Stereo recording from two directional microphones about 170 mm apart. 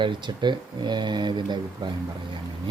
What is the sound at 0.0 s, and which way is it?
Speech, 25° right (ahead or behind).